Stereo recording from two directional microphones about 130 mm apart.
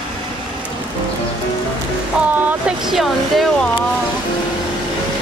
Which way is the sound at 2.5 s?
5° right (ahead or behind).